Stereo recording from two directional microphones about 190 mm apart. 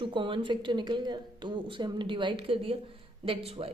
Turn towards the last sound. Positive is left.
turn(degrees=-30)  # may be behind; listen again after turning